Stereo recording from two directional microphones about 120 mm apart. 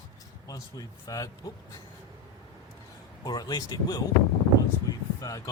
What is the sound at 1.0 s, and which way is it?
Speech, 30° left (ahead or behind).